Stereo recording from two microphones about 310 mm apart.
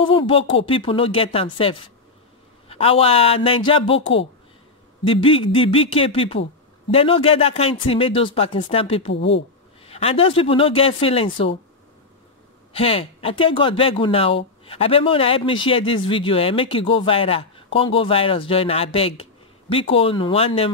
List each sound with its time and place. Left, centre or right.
0.3 s speech: centre
5.0 s speech: centre
9.1 s speech: left
9.8 s speech: centre
12.7 s speech: centre